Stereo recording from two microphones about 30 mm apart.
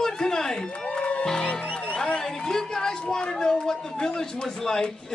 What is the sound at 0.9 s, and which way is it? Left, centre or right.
Music, left.